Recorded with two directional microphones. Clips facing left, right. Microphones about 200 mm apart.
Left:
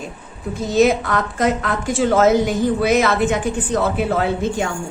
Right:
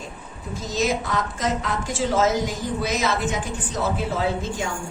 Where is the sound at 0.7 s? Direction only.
60° left (ahead or behind).